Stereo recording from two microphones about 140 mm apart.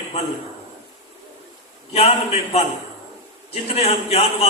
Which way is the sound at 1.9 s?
50° left (ahead or behind).